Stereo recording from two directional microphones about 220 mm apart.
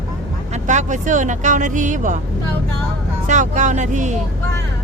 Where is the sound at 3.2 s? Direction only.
35° right (ahead or behind).